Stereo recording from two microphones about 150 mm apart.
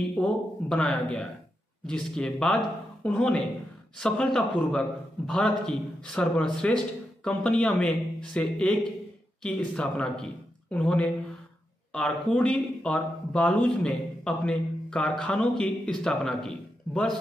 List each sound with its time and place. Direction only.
0.1 s speech: 5° left (ahead or behind)